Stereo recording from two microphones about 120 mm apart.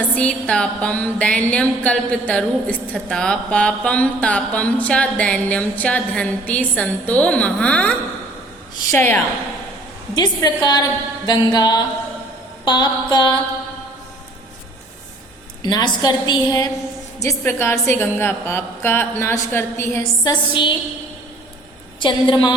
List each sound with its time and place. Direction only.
0.2 s a sound: 10° left (ahead or behind)
10.2 s a woman's voice: 35° left (ahead or behind)
15.6 s a woman's voice: 40° left (ahead or behind); by 20.0 s 20° left (ahead or behind)
20.0 s a woman's voice: 40° left (ahead or behind)
22.0 s a woman's voice: 40° left (ahead or behind)